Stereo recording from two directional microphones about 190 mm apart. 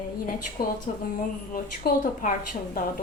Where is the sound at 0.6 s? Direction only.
50° left (ahead or behind).